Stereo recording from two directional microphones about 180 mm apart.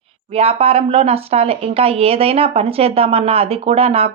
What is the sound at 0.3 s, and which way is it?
Speech, 35° right (ahead or behind).